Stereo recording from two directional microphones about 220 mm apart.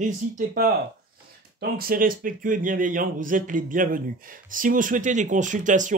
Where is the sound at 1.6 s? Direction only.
40° right (ahead or behind).